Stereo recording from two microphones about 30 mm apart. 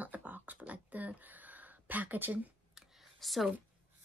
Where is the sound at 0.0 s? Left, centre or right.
Right.